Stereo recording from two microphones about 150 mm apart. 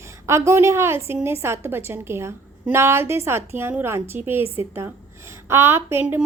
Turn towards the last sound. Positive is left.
turn(degrees=-15)  # may be behind; listen again after turning